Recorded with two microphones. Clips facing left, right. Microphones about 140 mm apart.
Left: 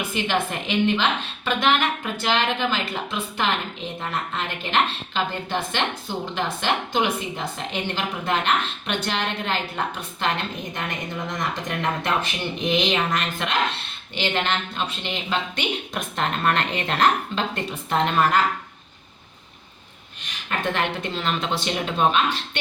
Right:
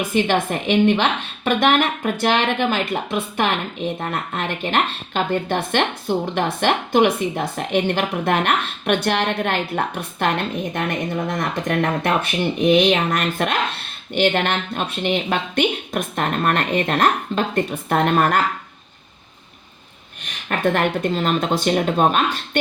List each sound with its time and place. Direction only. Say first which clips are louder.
0.1 s a woman's voice: right 6 dB; 50° right (ahead or behind)
20.5 s a woman's voice: right 6 dB; 50° right (ahead or behind)